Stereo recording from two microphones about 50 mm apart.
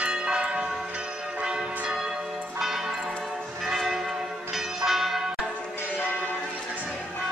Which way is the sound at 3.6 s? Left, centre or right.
Centre.